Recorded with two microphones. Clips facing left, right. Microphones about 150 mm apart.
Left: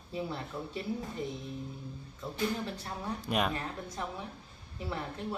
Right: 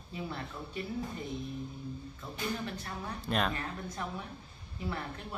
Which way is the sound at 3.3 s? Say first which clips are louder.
Even; 10° left (ahead or behind).